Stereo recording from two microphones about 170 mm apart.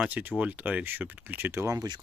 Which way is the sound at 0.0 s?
10° right (ahead or behind).